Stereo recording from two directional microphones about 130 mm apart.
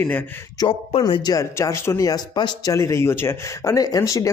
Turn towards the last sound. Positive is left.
turn(degrees=25)  # may be behind; listen again after turning